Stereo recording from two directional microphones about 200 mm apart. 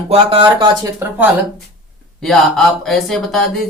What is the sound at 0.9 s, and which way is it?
Speech, 10° right (ahead or behind).